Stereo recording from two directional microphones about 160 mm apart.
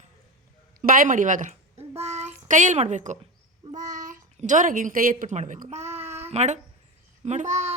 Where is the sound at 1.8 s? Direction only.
40° right (ahead or behind).